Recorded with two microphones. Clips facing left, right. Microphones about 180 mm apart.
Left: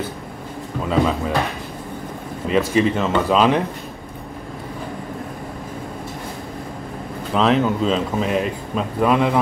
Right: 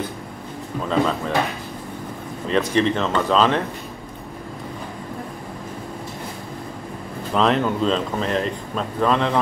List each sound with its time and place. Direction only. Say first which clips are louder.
0.8 s speech: left 2 dB; 5° left (ahead or behind)
2.4 s speech: left 2 dB; 5° left (ahead or behind)
7.3 s speech: left 2 dB; centre (ahead or behind)